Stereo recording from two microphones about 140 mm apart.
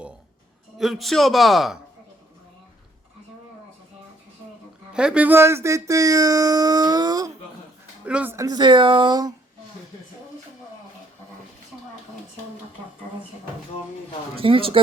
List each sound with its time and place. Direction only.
0.8 s a man's voice: centre (ahead or behind)
4.9 s speech: 10° right (ahead or behind); by 7.3 s 25° right (ahead or behind)
8.0 s speech: 10° right (ahead or behind)
8.4 s speech: 30° right (ahead or behind)
14.3 s speech: 40° right (ahead or behind)